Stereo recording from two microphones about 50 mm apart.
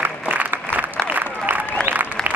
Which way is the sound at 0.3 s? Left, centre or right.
Right.